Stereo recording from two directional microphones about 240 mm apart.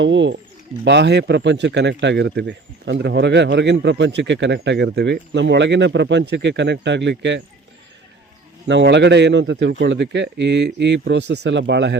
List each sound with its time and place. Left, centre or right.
0.0 s speech: right
8.6 s speech: right